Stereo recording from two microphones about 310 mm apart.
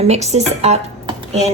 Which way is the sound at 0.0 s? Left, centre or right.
Right.